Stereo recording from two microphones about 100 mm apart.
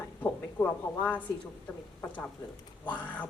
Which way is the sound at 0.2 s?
15° left (ahead or behind).